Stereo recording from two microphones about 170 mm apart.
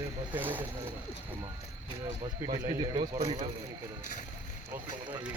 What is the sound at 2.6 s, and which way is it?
Speech, 20° right (ahead or behind).